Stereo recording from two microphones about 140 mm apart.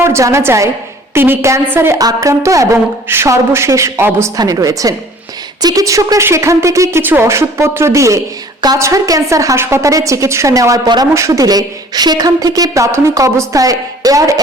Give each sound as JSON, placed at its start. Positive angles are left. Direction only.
{"t": 0.0, "sound": "a woman's voice", "side_deg": -20}